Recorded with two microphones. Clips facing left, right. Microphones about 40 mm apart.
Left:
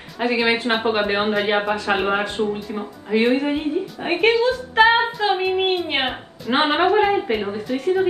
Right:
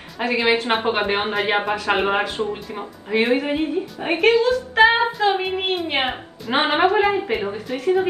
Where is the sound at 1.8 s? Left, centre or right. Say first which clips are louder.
Even; right.